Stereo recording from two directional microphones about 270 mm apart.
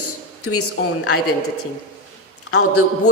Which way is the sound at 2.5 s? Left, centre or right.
Left.